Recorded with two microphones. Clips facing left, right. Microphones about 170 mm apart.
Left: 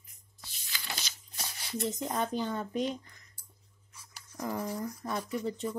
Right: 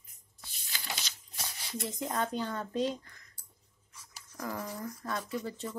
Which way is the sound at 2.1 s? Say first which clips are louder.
Even; 15° left (ahead or behind).